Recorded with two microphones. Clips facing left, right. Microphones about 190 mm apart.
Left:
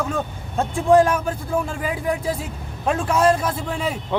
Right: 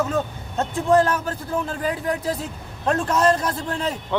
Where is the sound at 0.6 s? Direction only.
10° left (ahead or behind).